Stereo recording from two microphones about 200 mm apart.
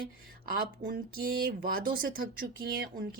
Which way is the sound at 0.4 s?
45° right (ahead or behind).